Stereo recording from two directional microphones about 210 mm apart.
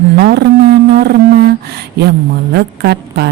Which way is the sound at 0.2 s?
50° right (ahead or behind).